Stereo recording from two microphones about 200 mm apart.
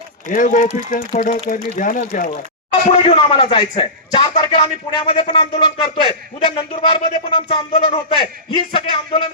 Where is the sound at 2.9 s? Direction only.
25° left (ahead or behind).